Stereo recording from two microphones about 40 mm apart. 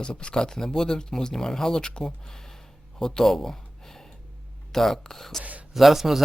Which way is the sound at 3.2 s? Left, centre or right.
Centre.